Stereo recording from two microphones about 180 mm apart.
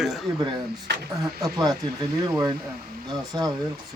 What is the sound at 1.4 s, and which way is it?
Speech, 20° right (ahead or behind).